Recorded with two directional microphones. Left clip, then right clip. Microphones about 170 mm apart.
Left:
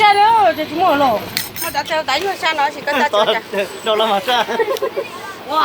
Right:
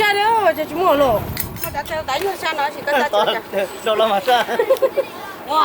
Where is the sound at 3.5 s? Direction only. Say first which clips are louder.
Left 1 dB; 50° right (ahead or behind).